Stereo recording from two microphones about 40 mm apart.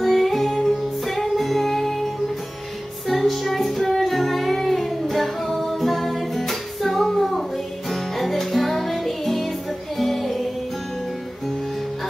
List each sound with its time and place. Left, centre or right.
0.0 s music: centre
3.1 s music: centre